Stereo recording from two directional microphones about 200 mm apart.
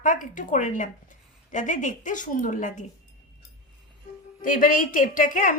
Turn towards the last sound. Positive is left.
turn(degrees=40)  # may be behind; listen again after turning